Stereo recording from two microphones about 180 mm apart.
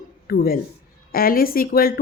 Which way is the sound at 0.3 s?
55° left (ahead or behind).